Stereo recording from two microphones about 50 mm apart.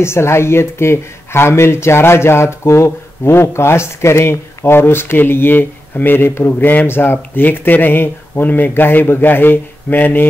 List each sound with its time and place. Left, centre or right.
0.0 s speech: left